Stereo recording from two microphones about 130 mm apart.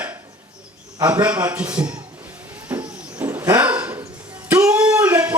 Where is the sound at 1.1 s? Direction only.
10° right (ahead or behind).